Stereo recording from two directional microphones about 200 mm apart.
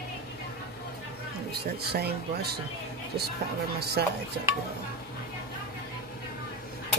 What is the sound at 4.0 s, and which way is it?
Speech, 50° right (ahead or behind).